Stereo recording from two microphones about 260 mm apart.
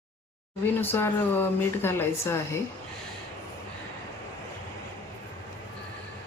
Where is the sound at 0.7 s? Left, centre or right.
Centre.